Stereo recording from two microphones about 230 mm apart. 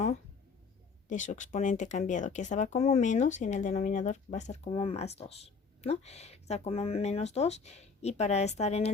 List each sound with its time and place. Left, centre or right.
1.0 s speech: left